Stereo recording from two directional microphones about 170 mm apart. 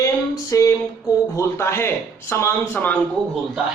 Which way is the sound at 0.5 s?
20° left (ahead or behind).